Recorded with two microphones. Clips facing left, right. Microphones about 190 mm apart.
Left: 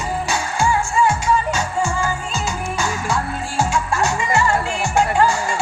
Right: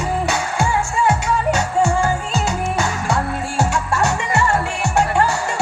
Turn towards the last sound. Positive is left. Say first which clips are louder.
# left 1 dB
turn(degrees=-65)  # may be behind; listen again after turning